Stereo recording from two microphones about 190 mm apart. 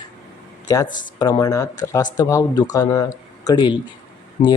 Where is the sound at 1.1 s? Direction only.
20° left (ahead or behind).